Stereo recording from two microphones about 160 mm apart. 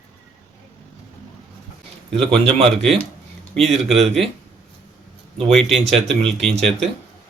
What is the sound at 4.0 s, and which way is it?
Speech, 40° right (ahead or behind).